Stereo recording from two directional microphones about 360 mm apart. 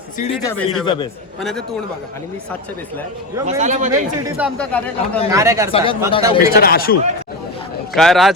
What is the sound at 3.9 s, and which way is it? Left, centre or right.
Speech, centre.